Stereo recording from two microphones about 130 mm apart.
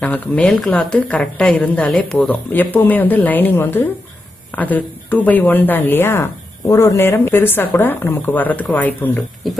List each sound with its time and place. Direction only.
0.0 s speech: 10° left (ahead or behind)